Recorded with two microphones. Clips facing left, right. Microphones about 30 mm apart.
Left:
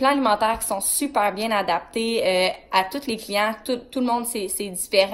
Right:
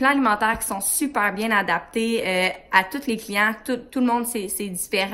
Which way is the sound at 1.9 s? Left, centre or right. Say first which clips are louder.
Left 1 dB; left.